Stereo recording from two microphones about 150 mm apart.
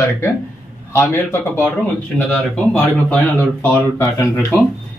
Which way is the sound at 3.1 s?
15° left (ahead or behind).